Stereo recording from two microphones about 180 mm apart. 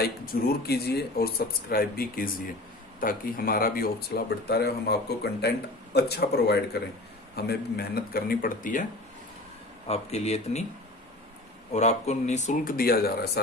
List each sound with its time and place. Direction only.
0.0 s speech: 60° left (ahead or behind)
9.8 s speech: 35° left (ahead or behind)
11.7 s speech: 40° left (ahead or behind); by 13.4 s 55° left (ahead or behind)